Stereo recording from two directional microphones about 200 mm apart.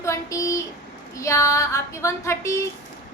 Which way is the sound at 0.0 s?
15° left (ahead or behind).